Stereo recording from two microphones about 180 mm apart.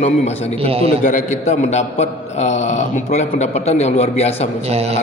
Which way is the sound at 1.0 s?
40° left (ahead or behind).